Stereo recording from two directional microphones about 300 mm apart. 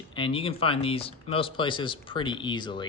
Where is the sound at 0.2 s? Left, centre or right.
Centre.